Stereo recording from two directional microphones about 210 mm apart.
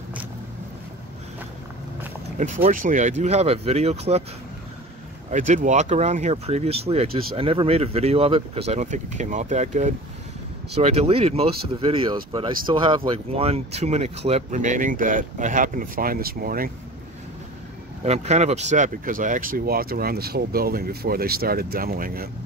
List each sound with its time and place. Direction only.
2.3 s speech: 35° right (ahead or behind)
5.3 s speech: 35° right (ahead or behind)
18.0 s speech: 30° right (ahead or behind)